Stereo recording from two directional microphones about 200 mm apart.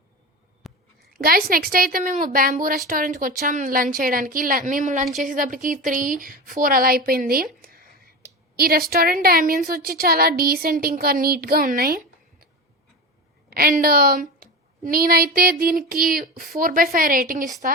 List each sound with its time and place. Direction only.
0.6 s a sound: centre (ahead or behind)
1.2 s a woman's voice: 45° right (ahead or behind)
13.5 s a woman's voice: 45° right (ahead or behind)